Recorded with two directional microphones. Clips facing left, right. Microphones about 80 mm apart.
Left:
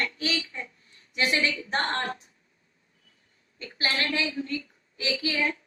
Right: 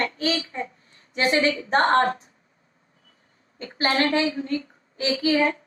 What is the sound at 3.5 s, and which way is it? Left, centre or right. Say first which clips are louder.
A woman's voice: right 7 dB; right.